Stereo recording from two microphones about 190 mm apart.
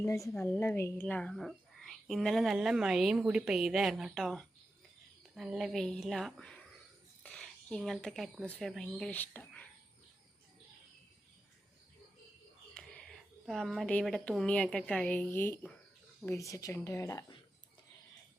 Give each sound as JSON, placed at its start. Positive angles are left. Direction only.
{"t": 0.0, "sound": "a woman's voice", "side_deg": 15}
{"t": 7.2, "sound": "a sound", "side_deg": 5}
{"t": 8.5, "sound": "a woman's voice", "side_deg": 0}
{"t": 12.7, "sound": "a woman's voice", "side_deg": 5}